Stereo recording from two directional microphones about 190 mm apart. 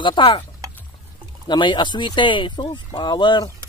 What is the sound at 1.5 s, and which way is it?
A woman's voice, 25° left (ahead or behind).